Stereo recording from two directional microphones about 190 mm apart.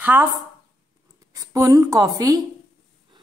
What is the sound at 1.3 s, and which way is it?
A woman's voice, 15° right (ahead or behind).